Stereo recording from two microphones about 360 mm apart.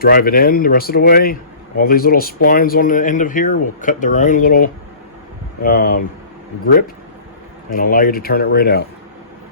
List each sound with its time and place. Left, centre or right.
0.0 s speech: left
7.7 s speech: left